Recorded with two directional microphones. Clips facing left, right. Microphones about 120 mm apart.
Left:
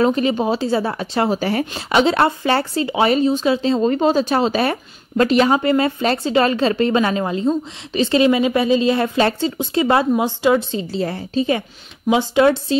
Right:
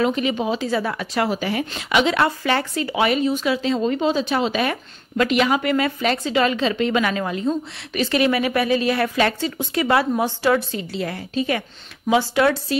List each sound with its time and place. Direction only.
0.0 s a woman's voice: 35° left (ahead or behind); by 10.8 s 15° left (ahead or behind)
10.8 s a woman's voice: 30° left (ahead or behind)